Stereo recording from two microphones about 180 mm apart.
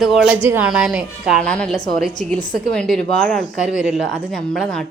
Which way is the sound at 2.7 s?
5° left (ahead or behind).